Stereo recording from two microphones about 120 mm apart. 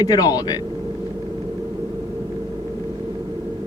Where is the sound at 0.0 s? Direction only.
30° left (ahead or behind).